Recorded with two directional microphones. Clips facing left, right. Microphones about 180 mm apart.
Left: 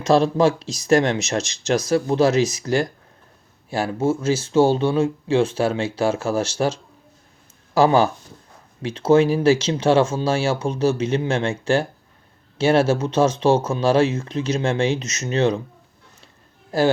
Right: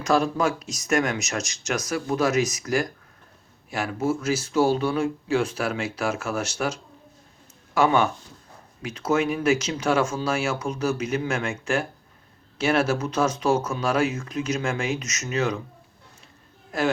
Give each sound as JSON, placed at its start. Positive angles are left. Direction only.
{"t": 0.0, "sound": "speech", "side_deg": 25}
{"t": 16.7, "sound": "speech", "side_deg": 30}